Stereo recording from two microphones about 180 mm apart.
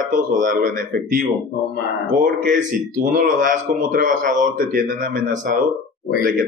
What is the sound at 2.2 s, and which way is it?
A man's voice, 50° right (ahead or behind).